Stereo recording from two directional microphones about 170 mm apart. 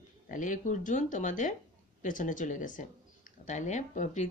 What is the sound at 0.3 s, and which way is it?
Speech, 50° left (ahead or behind).